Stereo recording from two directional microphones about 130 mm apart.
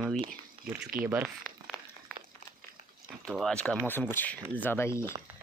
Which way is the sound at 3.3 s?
5° left (ahead or behind).